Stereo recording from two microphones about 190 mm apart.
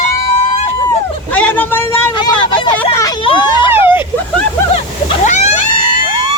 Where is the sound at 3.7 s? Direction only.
10° right (ahead or behind).